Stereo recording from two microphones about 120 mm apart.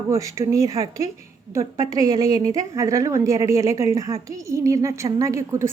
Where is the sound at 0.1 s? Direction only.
25° right (ahead or behind).